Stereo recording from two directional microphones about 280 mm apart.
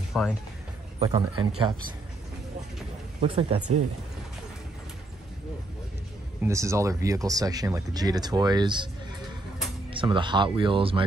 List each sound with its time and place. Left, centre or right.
0.1 s speech: centre
0.9 s speech: centre
3.2 s speech: right
6.4 s speech: centre
9.8 s speech: centre